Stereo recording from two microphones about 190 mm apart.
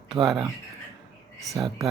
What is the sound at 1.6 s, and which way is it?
Speech, 20° right (ahead or behind).